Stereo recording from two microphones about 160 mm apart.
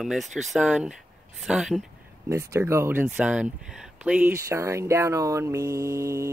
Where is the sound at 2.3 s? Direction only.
20° right (ahead or behind).